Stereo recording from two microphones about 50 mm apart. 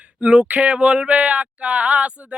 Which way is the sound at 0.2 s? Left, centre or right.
Right.